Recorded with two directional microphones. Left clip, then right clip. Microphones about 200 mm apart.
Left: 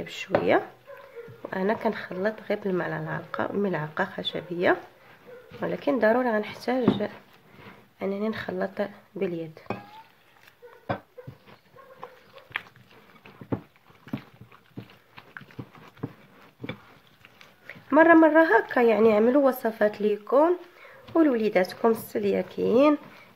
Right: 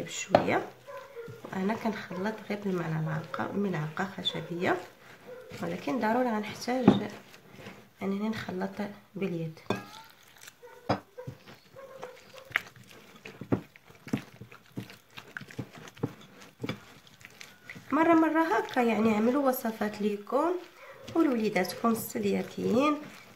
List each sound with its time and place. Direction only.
0.0 s speech: 45° left (ahead or behind)
17.6 s speech: 45° left (ahead or behind)